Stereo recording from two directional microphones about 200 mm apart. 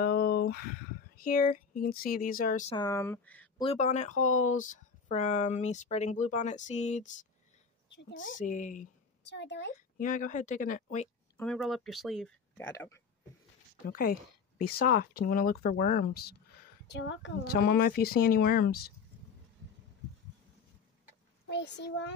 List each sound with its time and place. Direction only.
0.0 s speech: 50° left (ahead or behind)
2.7 s speech: 15° left (ahead or behind)
3.5 s speech: 30° left (ahead or behind)
7.9 s speech: 65° left (ahead or behind)
8.4 s speech: 40° left (ahead or behind)
9.2 s speech: 60° left (ahead or behind)
9.9 s speech: 40° left (ahead or behind)
11.3 s speech: 5° left (ahead or behind)
12.5 s speech: 10° left (ahead or behind)
13.8 s a woman's voice: 45° left (ahead or behind)
16.8 s a woman's voice: 60° left (ahead or behind)
21.5 s a child's voice: 60° left (ahead or behind)